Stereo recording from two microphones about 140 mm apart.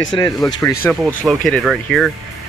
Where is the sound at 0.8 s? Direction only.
10° left (ahead or behind).